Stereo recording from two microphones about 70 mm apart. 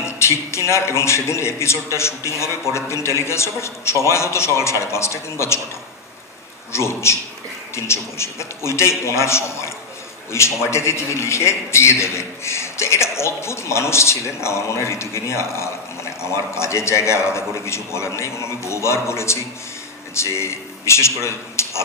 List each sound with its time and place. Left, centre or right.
0.0 s a man's voice: left
6.7 s a man's voice: left